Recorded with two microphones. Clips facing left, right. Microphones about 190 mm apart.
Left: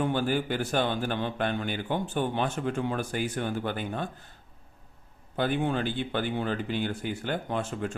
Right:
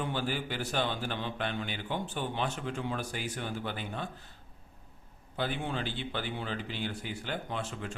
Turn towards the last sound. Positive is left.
turn(degrees=50)  # may be behind; listen again after turning